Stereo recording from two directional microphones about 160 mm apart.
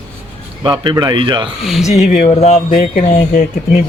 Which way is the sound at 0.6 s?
30° right (ahead or behind).